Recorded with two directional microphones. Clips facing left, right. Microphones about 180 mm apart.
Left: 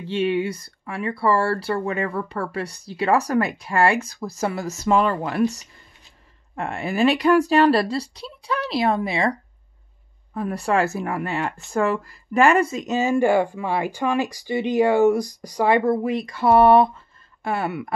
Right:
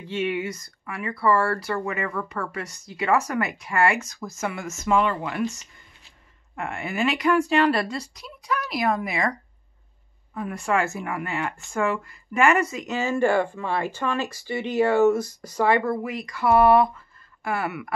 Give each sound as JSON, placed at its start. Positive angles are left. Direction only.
{"t": 0.0, "sound": "speech", "side_deg": 30}
{"t": 10.3, "sound": "speech", "side_deg": 35}
{"t": 12.8, "sound": "speech", "side_deg": 20}